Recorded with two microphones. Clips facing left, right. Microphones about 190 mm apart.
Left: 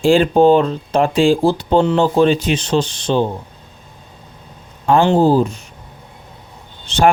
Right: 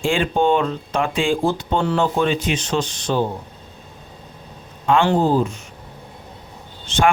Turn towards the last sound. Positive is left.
turn(degrees=35)  # may be behind; listen again after turning